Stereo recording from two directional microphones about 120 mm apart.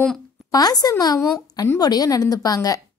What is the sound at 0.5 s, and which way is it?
A woman's voice, 30° left (ahead or behind).